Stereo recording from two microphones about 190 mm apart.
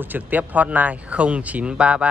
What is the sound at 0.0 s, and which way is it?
Speech, 10° right (ahead or behind).